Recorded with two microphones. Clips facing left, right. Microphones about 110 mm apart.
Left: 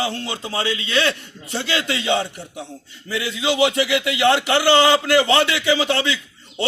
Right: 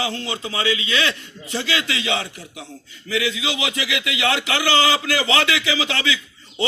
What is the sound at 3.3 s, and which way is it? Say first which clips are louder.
Speech: left 7 dB; 50° left (ahead or behind).